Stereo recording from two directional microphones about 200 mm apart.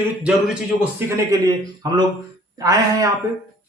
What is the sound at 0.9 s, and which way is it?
Speech, 15° right (ahead or behind).